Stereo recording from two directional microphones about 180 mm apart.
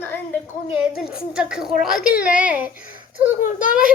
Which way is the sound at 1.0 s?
5° right (ahead or behind).